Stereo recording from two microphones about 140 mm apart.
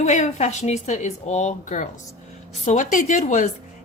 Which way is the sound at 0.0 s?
55° left (ahead or behind).